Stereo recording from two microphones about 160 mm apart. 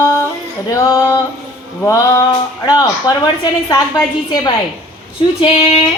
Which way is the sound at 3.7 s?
25° left (ahead or behind).